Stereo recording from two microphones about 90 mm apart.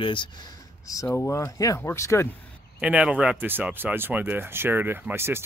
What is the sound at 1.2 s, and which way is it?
Speech, 30° left (ahead or behind).